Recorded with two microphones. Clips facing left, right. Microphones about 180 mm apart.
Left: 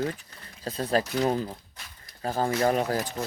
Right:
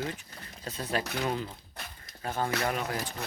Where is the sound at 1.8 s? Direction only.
60° right (ahead or behind).